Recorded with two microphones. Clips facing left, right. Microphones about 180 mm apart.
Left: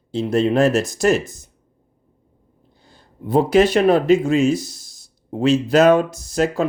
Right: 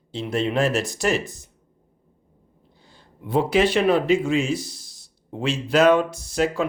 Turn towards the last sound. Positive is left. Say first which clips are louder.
# left 3 dB
turn(degrees=45)  # may be behind; listen again after turning